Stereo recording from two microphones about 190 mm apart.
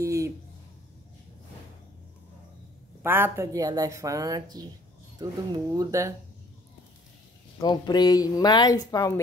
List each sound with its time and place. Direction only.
0.0 s a sound: 15° right (ahead or behind)
3.0 s speech: 10° right (ahead or behind)
7.6 s speech: 20° left (ahead or behind)